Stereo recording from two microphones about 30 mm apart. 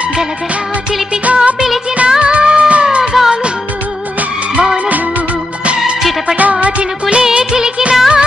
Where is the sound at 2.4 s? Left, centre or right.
Right.